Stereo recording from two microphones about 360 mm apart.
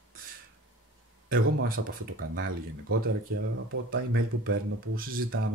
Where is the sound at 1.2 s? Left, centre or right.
Right.